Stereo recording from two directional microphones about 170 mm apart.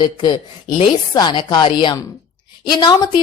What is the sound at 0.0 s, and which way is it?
A woman's voice, 25° left (ahead or behind).